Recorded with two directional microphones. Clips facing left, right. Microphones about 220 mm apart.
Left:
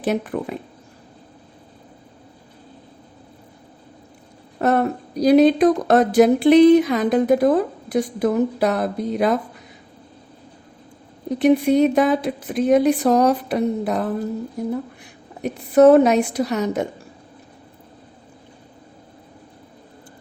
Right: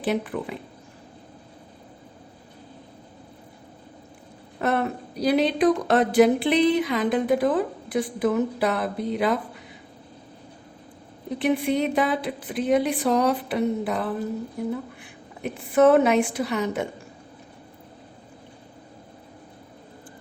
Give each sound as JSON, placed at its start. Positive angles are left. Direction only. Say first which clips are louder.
{"t": 0.0, "sound": "speech", "louder": "left 3 dB", "side_deg": 45}
{"t": 4.6, "sound": "speech", "louder": "left 5 dB", "side_deg": 40}
{"t": 11.3, "sound": "speech", "louder": "left 8 dB", "side_deg": 40}
{"t": 15.4, "sound": "a woman's voice", "louder": "left 5 dB", "side_deg": 40}